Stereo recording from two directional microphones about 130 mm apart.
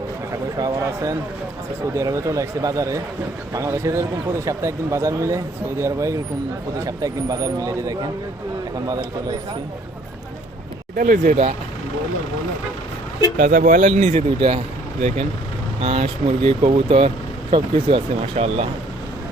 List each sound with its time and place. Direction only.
0.3 s speech: 25° right (ahead or behind)
10.9 s speech: 90° right; by 11.5 s 70° right (ahead or behind)
13.3 s speech: 90° right; by 14.6 s 50° right (ahead or behind)
15.8 s speech: 55° right (ahead or behind)